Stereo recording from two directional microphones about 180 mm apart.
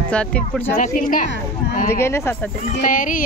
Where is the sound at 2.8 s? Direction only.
50° left (ahead or behind).